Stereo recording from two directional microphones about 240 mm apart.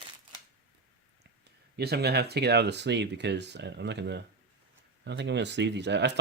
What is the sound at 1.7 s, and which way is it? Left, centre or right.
Speech, right.